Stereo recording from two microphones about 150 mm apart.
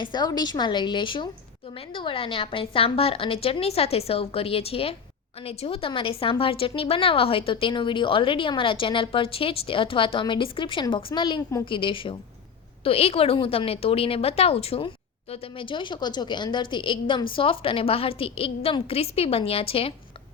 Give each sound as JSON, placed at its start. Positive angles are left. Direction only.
{"t": 0.0, "sound": "a woman's voice", "side_deg": 30}